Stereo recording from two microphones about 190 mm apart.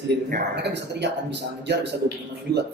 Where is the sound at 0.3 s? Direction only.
60° right (ahead or behind).